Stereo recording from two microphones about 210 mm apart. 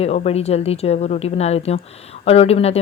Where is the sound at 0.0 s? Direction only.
30° left (ahead or behind).